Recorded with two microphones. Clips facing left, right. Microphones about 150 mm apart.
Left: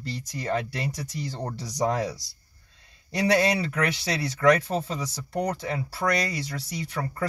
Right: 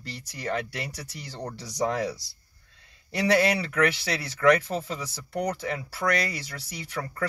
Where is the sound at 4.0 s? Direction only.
35° left (ahead or behind).